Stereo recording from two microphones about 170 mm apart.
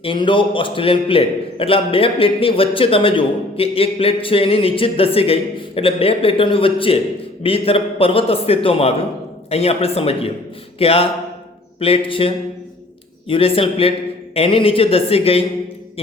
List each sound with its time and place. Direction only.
0.0 s a man's voice: 30° left (ahead or behind)